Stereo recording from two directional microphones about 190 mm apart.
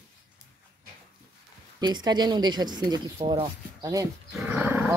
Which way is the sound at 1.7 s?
20° right (ahead or behind).